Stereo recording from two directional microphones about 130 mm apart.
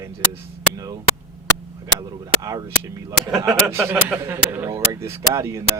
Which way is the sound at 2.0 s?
25° right (ahead or behind).